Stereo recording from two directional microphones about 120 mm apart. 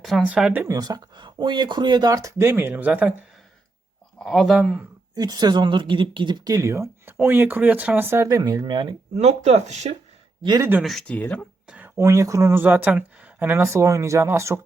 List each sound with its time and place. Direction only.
0.0 s speech: centre (ahead or behind)
0.7 s speech: 30° right (ahead or behind); by 3.1 s 10° right (ahead or behind)
4.2 s speech: centre (ahead or behind)
5.1 s speech: 35° right (ahead or behind)
8.4 s speech: 35° right (ahead or behind)
9.1 s speech: 65° right (ahead or behind)
10.4 s speech: 35° right (ahead or behind)
10.8 s speech: 5° left (ahead or behind)
11.6 s a sound: 10° right (ahead or behind)
11.9 s speech: 25° right (ahead or behind)